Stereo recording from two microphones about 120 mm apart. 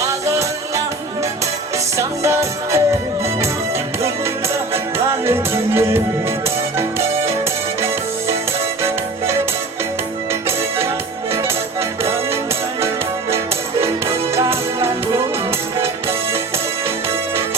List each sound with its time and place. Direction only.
2.0 s music: 25° right (ahead or behind)
4.0 s music: 20° right (ahead or behind)
12.0 s music: 20° right (ahead or behind)
14.3 s music: 20° right (ahead or behind)